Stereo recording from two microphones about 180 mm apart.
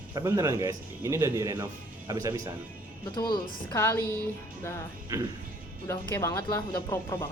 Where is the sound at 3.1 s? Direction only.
25° left (ahead or behind).